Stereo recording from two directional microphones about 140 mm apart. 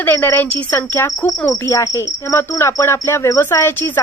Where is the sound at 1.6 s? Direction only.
20° left (ahead or behind).